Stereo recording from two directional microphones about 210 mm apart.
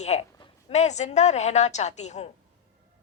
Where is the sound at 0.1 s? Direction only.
30° left (ahead or behind).